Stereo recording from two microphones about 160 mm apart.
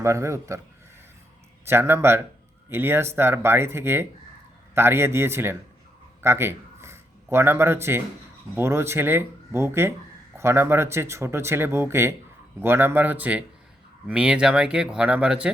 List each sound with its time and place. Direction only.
0.0 s speech: 20° right (ahead or behind)
1.6 s speech: 15° right (ahead or behind)